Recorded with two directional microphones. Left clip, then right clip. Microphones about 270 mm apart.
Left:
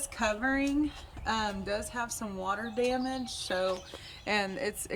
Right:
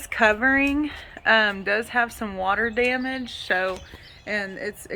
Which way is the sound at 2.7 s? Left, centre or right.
Centre.